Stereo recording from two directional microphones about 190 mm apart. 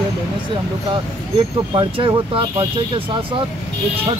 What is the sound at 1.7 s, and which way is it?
Speech, 25° right (ahead or behind).